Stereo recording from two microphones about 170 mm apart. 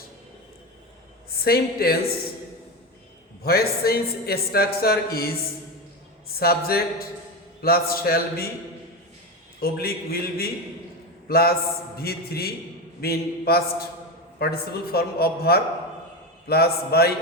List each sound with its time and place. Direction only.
1.4 s a man's voice: 65° left (ahead or behind)
3.4 s a man's voice: 65° left (ahead or behind)
9.6 s a man's voice: 65° left (ahead or behind)